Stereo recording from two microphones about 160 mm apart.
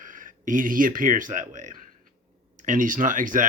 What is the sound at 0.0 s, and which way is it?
Speech, 55° right (ahead or behind).